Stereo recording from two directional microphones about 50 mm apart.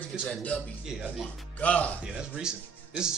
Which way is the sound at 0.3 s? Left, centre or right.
Left.